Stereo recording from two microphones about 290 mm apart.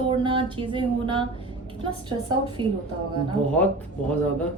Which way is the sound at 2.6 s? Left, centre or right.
Centre.